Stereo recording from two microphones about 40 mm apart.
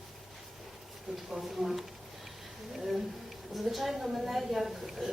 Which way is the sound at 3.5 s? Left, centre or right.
Centre.